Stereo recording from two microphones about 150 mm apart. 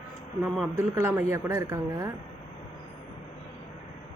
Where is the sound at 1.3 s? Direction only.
20° right (ahead or behind).